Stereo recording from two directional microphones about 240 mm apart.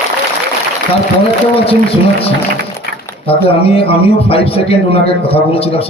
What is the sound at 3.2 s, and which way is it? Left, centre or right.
A man's voice, left.